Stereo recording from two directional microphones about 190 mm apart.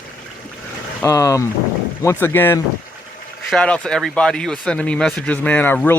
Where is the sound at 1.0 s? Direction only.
15° left (ahead or behind).